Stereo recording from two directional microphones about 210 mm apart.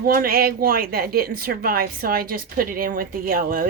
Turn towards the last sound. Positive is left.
turn(degrees=-40)  # may be behind; listen again after turning